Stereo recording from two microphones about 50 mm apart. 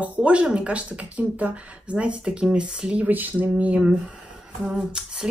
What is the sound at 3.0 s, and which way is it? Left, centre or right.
Speech, right.